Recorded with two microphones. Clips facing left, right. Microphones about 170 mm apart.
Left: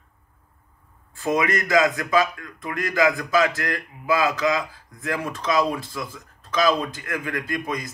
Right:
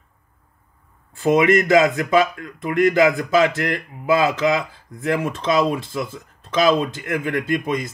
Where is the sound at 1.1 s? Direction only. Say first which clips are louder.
Right 7 dB; 25° right (ahead or behind).